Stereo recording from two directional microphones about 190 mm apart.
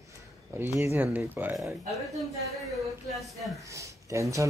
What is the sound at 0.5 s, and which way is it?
Speech, 15° right (ahead or behind).